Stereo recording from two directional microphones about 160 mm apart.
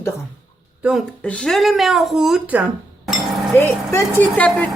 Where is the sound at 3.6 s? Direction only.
15° left (ahead or behind).